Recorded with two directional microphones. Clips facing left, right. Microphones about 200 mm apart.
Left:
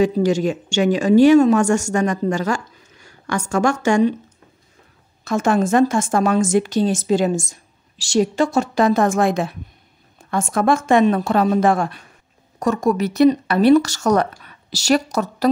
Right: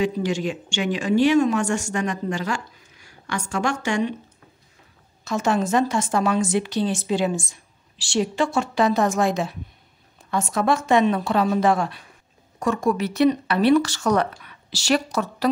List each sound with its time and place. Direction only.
0.0 s a woman's voice: 40° left (ahead or behind)
5.2 s a woman's voice: 50° left (ahead or behind)